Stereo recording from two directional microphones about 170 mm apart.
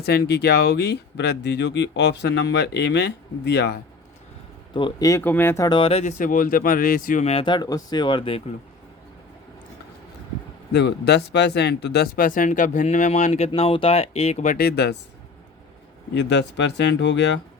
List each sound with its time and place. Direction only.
0.0 s speech: 70° left (ahead or behind)
4.7 s speech: 25° left (ahead or behind)
5.6 s speech: 30° left (ahead or behind); by 7.3 s 55° left (ahead or behind)
7.3 s speech: 30° left (ahead or behind)
10.7 s speech: 90° left; by 14.6 s 45° left (ahead or behind)
14.6 s speech: 80° left
16.1 s speech: 90° left